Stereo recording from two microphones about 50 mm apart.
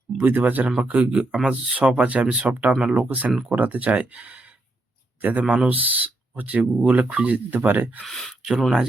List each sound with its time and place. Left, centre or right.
0.2 s speech: right
2.5 s speech: right
2.7 s speech: centre
3.0 s speech: right
7.6 s speech: right
8.0 s speech: centre